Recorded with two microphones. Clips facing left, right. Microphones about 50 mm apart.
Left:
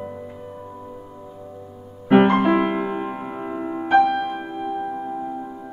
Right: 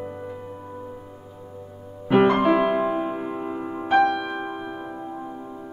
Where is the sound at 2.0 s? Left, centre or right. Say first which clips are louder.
Left 3 dB; left.